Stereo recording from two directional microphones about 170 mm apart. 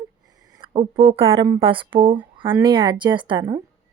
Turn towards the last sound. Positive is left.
turn(degrees=-30)  # may be behind; listen again after turning